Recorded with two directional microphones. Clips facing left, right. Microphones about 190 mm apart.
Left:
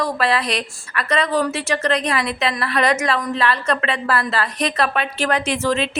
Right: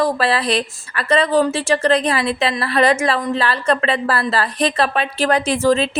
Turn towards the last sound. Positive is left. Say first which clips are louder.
# right 4 dB
turn(degrees=-35)  # may be behind; listen again after turning